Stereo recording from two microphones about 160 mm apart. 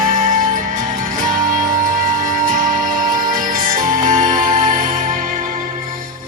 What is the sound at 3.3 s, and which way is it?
Music, 60° right (ahead or behind).